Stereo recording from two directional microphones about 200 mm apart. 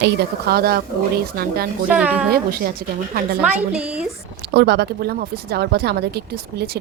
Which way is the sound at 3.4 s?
5° right (ahead or behind).